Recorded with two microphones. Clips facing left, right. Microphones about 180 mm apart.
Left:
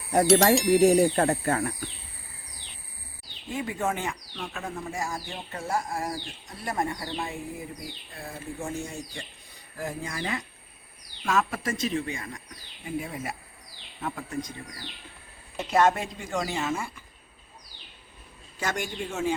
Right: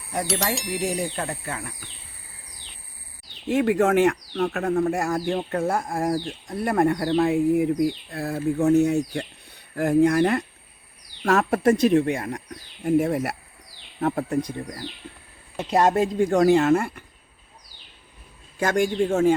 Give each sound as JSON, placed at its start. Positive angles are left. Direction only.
{"t": 0.5, "sound": "speech", "side_deg": 0}
{"t": 0.9, "sound": "speech", "side_deg": 50}
{"t": 3.5, "sound": "speech", "side_deg": -80}
{"t": 12.8, "sound": "speech", "side_deg": -75}
{"t": 14.3, "sound": "speech", "side_deg": -60}
{"t": 15.7, "sound": "speech", "side_deg": -35}
{"t": 18.6, "sound": "speech", "side_deg": -50}